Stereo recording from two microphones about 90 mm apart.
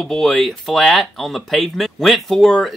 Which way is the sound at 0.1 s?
5° left (ahead or behind).